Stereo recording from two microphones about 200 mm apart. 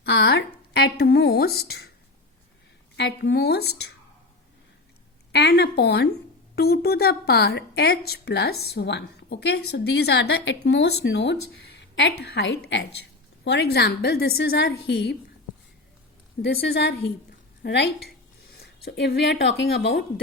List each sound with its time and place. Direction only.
0.0 s speech: 55° left (ahead or behind)
2.9 s a woman's voice: 60° left (ahead or behind)
5.3 s a woman's voice: 55° left (ahead or behind)
16.4 s a woman's voice: 55° left (ahead or behind)
18.9 s a woman's voice: 55° left (ahead or behind)